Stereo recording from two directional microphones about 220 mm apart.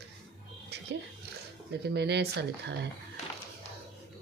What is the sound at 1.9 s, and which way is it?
Speech, 50° right (ahead or behind).